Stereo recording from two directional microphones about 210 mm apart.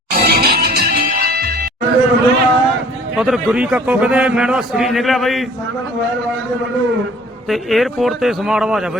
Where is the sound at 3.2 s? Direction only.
Centre (ahead or behind).